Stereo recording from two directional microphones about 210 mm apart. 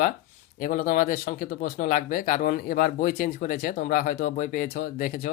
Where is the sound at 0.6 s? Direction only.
40° left (ahead or behind).